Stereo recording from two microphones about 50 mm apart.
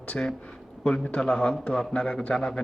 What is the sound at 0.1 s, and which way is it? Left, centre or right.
A man's voice, centre.